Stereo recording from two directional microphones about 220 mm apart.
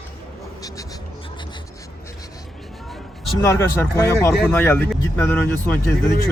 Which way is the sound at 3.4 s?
10° left (ahead or behind).